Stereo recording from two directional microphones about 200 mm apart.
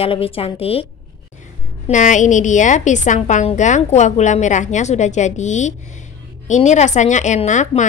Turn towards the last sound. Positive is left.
turn(degrees=35)  # may be behind; listen again after turning